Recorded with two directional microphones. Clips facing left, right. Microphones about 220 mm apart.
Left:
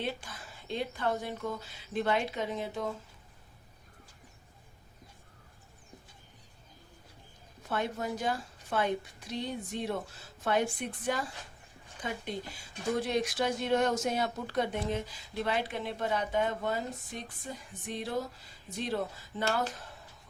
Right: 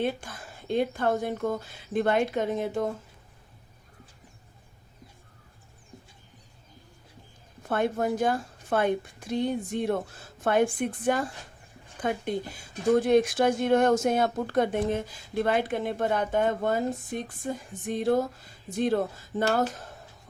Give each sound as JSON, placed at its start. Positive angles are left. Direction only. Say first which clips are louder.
{"t": 0.0, "sound": "speech", "louder": "right 7 dB", "side_deg": -50}
{"t": 7.7, "sound": "speech", "louder": "right 7 dB", "side_deg": -50}